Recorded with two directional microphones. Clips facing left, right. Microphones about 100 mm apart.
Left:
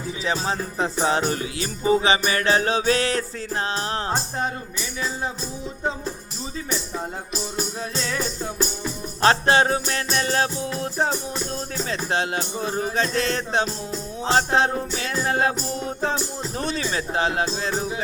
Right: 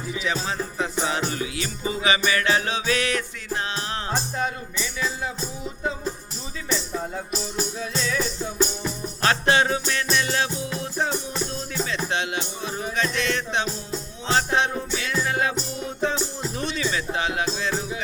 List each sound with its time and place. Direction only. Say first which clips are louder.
0.1 s music: left 2 dB; 35° left (ahead or behind)
7.8 s music: right 1 dB; 50° left (ahead or behind)
9.2 s music: left 3 dB; 35° left (ahead or behind)